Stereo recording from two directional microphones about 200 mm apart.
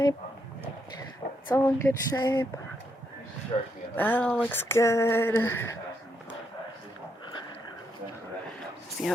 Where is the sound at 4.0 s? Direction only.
10° left (ahead or behind).